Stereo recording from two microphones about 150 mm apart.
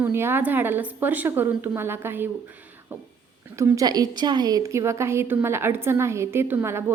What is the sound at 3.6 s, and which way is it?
A woman's voice, 25° right (ahead or behind).